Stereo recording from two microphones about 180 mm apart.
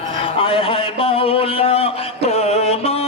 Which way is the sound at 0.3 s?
30° left (ahead or behind).